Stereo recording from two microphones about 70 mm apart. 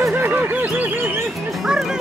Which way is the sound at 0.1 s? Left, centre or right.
Right.